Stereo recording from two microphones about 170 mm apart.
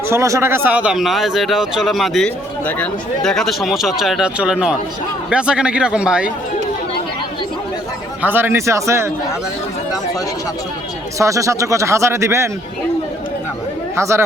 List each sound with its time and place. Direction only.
0.1 s speech: 15° right (ahead or behind)
8.2 s speech: 10° right (ahead or behind)
11.2 s speech: 20° right (ahead or behind)
13.9 s speech: 15° right (ahead or behind)